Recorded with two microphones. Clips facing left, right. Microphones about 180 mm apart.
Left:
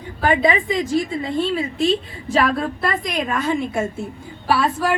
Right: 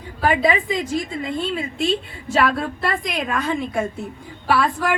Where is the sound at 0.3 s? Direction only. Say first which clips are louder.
Left 1 dB; 30° left (ahead or behind).